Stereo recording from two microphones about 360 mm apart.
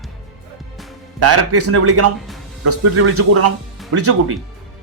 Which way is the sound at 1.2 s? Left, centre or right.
Right.